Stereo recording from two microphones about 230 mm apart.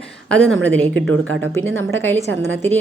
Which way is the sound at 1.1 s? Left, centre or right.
Right.